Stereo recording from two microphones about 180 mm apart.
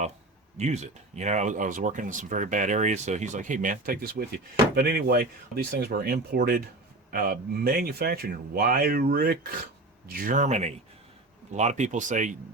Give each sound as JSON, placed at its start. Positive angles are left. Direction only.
{"t": 0.5, "sound": "speech", "side_deg": -40}